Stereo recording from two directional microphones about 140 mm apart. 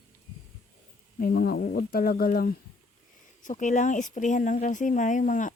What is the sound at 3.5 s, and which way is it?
Speech, 65° left (ahead or behind).